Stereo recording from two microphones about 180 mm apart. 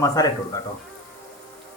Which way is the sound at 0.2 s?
20° left (ahead or behind).